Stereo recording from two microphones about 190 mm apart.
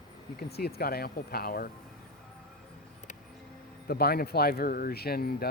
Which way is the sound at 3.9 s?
55° left (ahead or behind).